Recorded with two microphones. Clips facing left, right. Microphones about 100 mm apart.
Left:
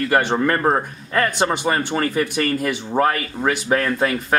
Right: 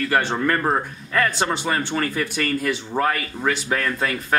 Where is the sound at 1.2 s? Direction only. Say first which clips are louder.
Left 3 dB; 15° left (ahead or behind).